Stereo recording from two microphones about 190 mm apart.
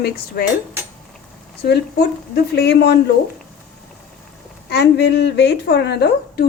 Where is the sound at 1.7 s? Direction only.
55° left (ahead or behind).